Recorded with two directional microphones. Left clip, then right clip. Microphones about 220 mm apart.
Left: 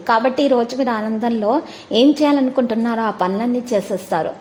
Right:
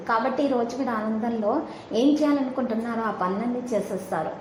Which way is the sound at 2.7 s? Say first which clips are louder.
Left 8 dB; 40° left (ahead or behind).